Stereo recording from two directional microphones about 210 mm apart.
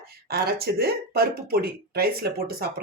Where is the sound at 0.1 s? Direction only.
45° right (ahead or behind).